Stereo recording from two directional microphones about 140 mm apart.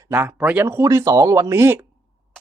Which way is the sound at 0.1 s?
15° right (ahead or behind).